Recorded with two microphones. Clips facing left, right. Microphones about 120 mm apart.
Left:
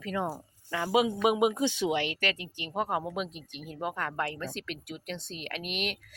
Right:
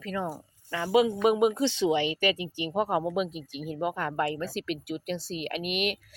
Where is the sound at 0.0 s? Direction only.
15° left (ahead or behind).